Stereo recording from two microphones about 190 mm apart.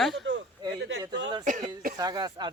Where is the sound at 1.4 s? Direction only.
45° right (ahead or behind).